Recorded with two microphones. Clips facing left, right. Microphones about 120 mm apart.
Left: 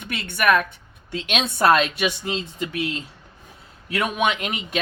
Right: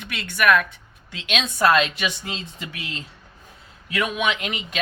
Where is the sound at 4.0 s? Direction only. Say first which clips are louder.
Left 1 dB; 45° left (ahead or behind).